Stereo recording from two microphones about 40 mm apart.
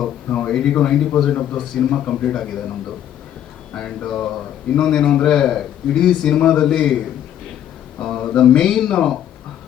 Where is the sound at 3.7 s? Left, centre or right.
Left.